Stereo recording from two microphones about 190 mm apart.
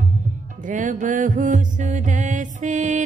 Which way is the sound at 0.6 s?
40° right (ahead or behind).